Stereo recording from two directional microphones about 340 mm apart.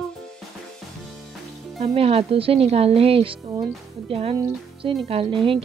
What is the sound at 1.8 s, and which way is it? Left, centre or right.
Speech, centre.